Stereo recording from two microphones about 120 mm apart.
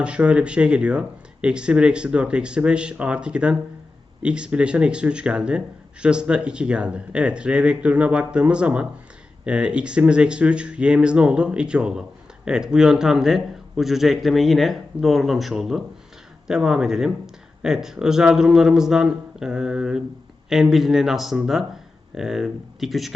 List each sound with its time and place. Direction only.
0.0 s a man's voice: 10° right (ahead or behind)